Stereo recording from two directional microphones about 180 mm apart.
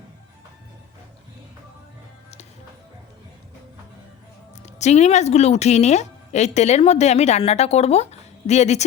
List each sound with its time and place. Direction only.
4.6 s a woman's voice: 40° left (ahead or behind)